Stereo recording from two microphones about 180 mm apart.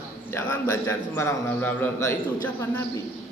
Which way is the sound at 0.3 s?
15° left (ahead or behind).